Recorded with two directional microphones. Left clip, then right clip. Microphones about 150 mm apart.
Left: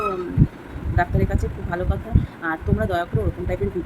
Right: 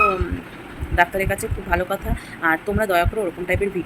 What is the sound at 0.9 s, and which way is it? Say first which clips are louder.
Speech: right 5 dB; centre (ahead or behind).